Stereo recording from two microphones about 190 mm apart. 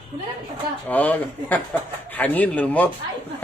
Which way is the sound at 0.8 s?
10° left (ahead or behind).